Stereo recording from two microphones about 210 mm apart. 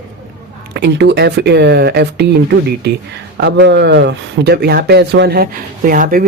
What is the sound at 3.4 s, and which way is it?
Speech, 55° right (ahead or behind).